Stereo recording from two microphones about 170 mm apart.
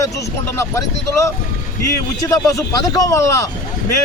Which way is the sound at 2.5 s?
20° left (ahead or behind).